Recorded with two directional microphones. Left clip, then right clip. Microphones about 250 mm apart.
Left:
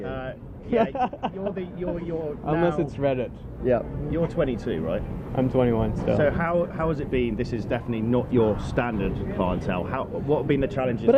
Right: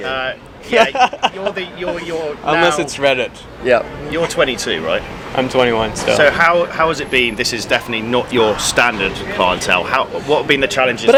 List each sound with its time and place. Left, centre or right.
0.0 s speech: centre